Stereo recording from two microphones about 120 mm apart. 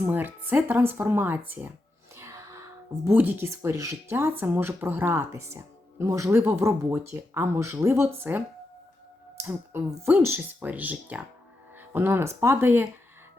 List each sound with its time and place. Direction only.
0.0 s speech: 15° right (ahead or behind)